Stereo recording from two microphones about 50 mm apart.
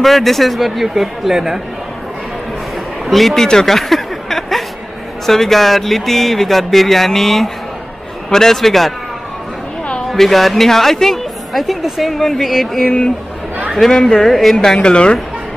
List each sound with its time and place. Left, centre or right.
0.0 s a woman's voice: centre
3.1 s a woman's voice: centre
3.4 s a sound: centre
5.2 s a woman's voice: centre
10.0 s a woman's voice: centre
12.8 s speech: left
13.7 s speech: centre